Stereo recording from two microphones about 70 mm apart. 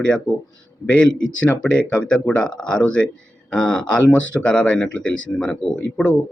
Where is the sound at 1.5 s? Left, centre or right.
Centre.